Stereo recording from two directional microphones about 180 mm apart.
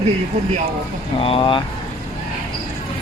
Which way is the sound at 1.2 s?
30° left (ahead or behind).